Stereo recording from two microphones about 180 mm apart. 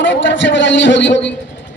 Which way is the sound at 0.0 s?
90° left.